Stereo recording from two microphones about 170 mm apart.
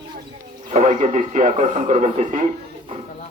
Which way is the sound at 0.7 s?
45° right (ahead or behind).